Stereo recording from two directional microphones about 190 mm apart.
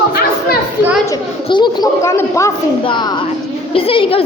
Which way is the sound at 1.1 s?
25° left (ahead or behind).